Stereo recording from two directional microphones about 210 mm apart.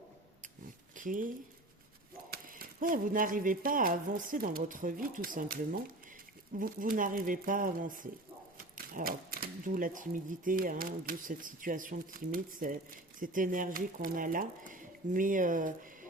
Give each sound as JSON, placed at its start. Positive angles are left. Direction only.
{"t": 0.9, "sound": "speech", "side_deg": -40}
{"t": 2.3, "sound": "speech", "side_deg": -45}